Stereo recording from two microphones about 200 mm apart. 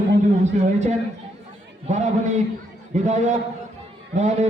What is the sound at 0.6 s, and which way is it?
A man's voice, 35° right (ahead or behind).